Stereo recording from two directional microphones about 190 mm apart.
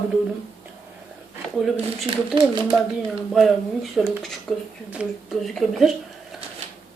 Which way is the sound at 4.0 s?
Centre (ahead or behind).